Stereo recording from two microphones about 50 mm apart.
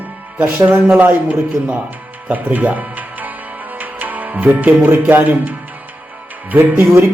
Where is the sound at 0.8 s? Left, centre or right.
Right.